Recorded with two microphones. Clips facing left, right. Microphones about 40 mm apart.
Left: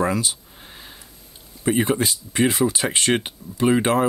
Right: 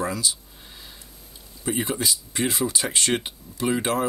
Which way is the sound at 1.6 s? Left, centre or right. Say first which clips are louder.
Left 6 dB; left.